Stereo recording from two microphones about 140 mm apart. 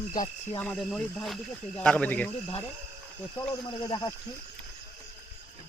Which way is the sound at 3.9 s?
25° left (ahead or behind).